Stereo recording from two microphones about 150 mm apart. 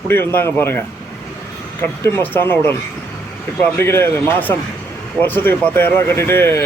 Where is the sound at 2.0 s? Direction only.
15° left (ahead or behind).